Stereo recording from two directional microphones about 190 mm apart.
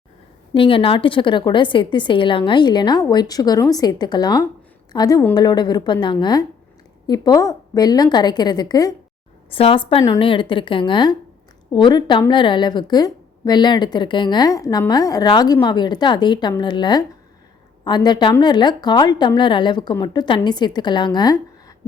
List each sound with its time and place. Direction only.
0.5 s a woman's voice: 30° left (ahead or behind)